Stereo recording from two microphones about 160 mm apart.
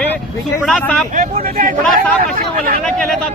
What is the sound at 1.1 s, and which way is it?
Speech, 55° right (ahead or behind).